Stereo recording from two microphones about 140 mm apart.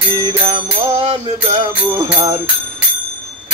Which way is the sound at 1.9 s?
30° right (ahead or behind).